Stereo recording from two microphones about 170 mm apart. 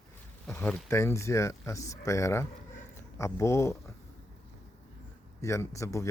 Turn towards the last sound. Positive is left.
turn(degrees=20)  # may be behind; listen again after turning